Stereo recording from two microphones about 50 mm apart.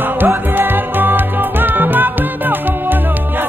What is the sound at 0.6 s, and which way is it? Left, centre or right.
Music, right.